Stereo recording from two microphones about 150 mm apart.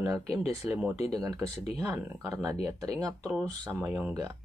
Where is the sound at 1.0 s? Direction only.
25° right (ahead or behind).